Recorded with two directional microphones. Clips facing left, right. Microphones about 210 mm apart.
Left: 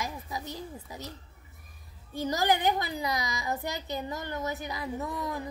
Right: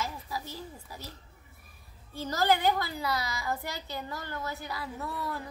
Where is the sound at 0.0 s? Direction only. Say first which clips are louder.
Even; 20° left (ahead or behind).